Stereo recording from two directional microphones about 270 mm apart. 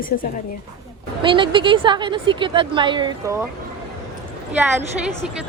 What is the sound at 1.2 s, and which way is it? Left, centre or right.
Speech, centre.